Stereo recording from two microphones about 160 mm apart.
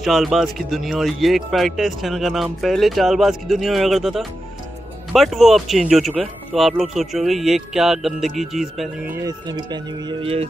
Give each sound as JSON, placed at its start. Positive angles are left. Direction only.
{"t": 0.0, "sound": "speech", "side_deg": 0}
{"t": 9.1, "sound": "speech", "side_deg": -25}